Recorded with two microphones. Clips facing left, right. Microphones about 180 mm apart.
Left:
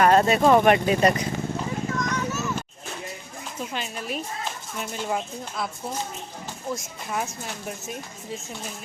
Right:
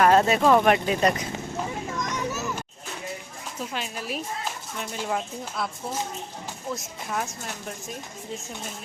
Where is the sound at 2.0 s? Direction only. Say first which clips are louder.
Left 2 dB; 15° right (ahead or behind).